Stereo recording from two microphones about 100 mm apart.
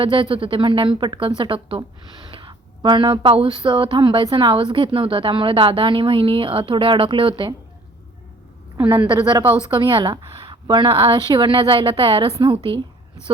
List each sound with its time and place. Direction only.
0.0 s speech: 60° right (ahead or behind)
8.8 s a woman's voice: 20° right (ahead or behind)
9.0 s a woman's voice: 45° right (ahead or behind)
9.5 s speech: 55° right (ahead or behind)